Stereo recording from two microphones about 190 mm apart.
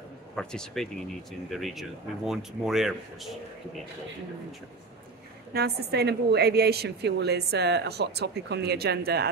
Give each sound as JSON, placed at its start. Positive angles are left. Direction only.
{"t": 0.4, "sound": "speech", "side_deg": 5}
{"t": 5.5, "sound": "a woman's voice", "side_deg": -55}